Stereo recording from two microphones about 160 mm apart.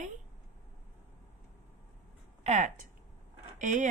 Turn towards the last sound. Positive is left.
turn(degrees=-50)  # may be behind; listen again after turning